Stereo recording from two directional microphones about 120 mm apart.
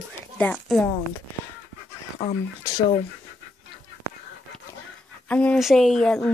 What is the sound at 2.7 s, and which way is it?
Speech, 25° left (ahead or behind).